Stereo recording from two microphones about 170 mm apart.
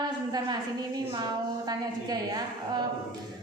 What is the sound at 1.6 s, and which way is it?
Female singing, 25° right (ahead or behind).